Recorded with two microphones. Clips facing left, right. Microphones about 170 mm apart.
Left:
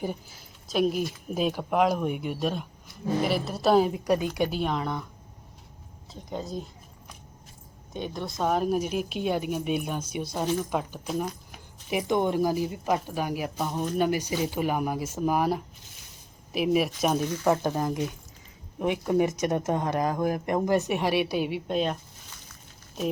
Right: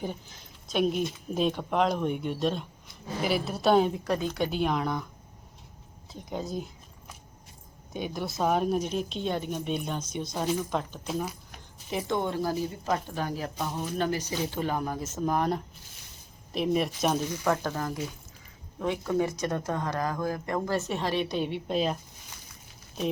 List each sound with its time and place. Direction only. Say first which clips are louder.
0.0 s speech: left 3 dB; 5° left (ahead or behind)
4.4 s speech: right 1 dB; centre (ahead or behind)
6.1 s speech: even; centre (ahead or behind)
7.9 s speech: even; 5° right (ahead or behind)
17.4 s speech: left 5 dB; 15° left (ahead or behind); by 21.9 s centre (ahead or behind)